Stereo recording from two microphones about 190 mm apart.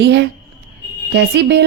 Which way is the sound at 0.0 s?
65° right (ahead or behind).